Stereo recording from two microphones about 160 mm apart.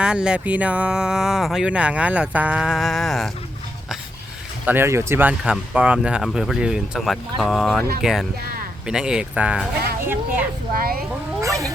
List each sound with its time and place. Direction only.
0.0 s speech: 5° right (ahead or behind)
4.6 s speech: 15° right (ahead or behind)
11.3 s cat: 20° right (ahead or behind)